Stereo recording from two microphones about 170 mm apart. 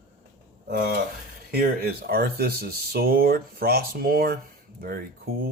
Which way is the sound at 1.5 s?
60° right (ahead or behind).